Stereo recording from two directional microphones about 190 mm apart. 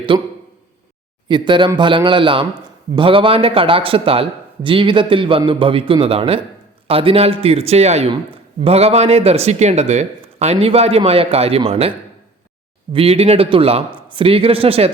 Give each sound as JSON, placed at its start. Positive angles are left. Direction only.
{"t": 0.1, "sound": "a man's voice", "side_deg": -25}
{"t": 1.3, "sound": "a man's voice", "side_deg": -25}